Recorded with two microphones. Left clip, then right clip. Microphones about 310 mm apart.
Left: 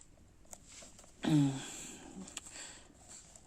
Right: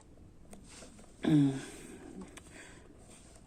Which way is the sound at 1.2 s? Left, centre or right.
Left.